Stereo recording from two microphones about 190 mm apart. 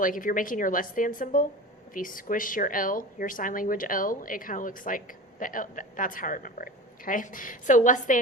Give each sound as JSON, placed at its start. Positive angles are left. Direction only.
{"t": 0.0, "sound": "speech", "side_deg": 45}